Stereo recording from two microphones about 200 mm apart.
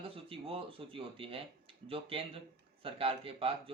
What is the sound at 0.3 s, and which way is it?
Speech, 25° right (ahead or behind).